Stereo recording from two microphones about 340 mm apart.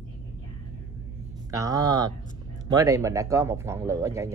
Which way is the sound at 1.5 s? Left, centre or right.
Centre.